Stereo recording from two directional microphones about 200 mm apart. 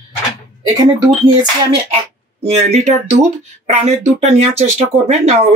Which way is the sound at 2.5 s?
35° right (ahead or behind).